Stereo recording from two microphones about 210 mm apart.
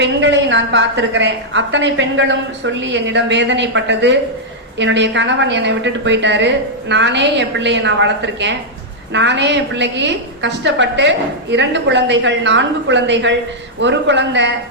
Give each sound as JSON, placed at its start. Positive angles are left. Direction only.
{"t": 0.0, "sound": "a woman's voice", "side_deg": -55}